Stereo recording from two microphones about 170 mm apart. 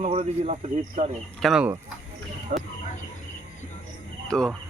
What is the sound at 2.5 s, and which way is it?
Speech, 50° right (ahead or behind).